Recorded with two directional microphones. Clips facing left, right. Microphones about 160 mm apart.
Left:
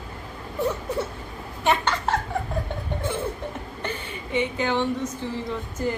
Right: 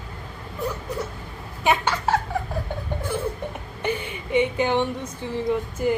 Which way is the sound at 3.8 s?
15° right (ahead or behind).